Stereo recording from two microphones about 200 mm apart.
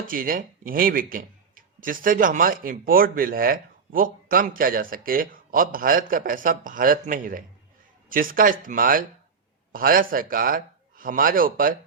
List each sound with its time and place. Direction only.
0.1 s a man's voice: 45° right (ahead or behind)